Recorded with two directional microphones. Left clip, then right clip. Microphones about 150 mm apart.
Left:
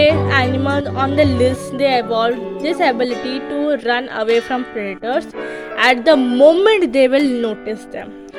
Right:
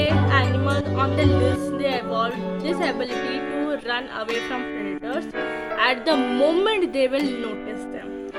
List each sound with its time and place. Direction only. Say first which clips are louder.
0.0 s music: left 8 dB; 55° left (ahead or behind)
1.8 s speech: left 11 dB; 55° left (ahead or behind)
5.7 s music: left 9 dB; 50° left (ahead or behind)
6.2 s speech: left 10 dB; 30° left (ahead or behind)
6.7 s speech: left 9 dB; 45° left (ahead or behind)